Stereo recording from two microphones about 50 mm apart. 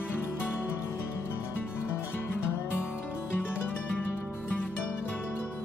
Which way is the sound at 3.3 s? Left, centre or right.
Left.